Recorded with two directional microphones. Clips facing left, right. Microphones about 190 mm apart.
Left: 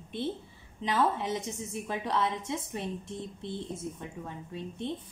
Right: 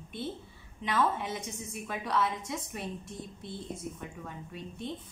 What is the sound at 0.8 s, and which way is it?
A woman's voice, 35° left (ahead or behind).